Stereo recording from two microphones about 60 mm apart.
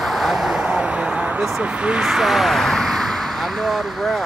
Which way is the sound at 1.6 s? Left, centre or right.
Centre.